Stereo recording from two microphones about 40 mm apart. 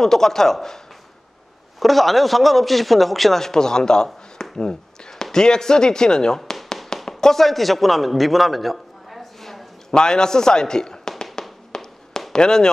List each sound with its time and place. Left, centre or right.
0.0 s a man's voice: centre
1.8 s a man's voice: centre
7.1 s a sound: centre
9.9 s a man's voice: centre
11.7 s fireworks: centre
12.3 s speech: centre